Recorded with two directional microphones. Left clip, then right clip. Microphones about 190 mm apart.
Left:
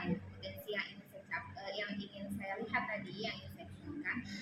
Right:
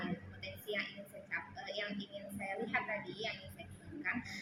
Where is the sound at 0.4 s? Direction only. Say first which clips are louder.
Right 1 dB; 10° right (ahead or behind).